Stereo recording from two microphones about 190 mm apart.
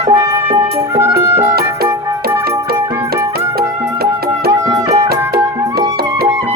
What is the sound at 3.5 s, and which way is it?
Music, 55° right (ahead or behind).